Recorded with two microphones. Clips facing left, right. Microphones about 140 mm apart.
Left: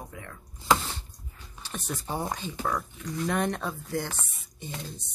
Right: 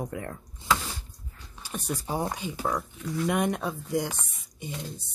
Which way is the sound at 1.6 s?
10° right (ahead or behind).